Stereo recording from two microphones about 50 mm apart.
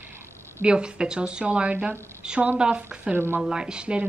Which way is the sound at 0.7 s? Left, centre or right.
Centre.